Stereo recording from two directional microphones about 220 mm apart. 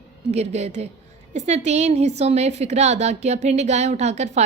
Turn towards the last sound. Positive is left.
turn(degrees=-30)  # may be behind; listen again after turning